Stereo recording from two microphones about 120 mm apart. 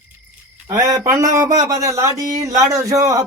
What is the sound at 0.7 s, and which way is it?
A man's voice, 25° right (ahead or behind).